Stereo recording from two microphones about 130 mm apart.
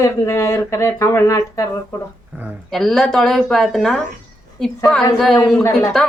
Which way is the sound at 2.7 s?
5° left (ahead or behind).